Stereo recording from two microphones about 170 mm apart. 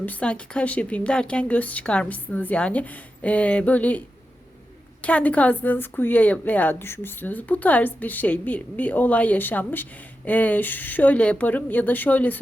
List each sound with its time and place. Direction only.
0.0 s speech: 10° left (ahead or behind)
5.0 s speech: 10° left (ahead or behind)